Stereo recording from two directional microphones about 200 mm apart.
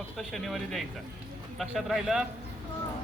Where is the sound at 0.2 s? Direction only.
Centre (ahead or behind).